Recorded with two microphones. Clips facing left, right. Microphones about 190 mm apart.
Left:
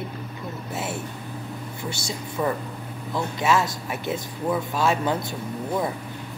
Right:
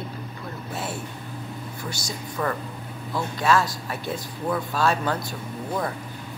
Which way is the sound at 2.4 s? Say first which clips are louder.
Left 2 dB; 15° left (ahead or behind).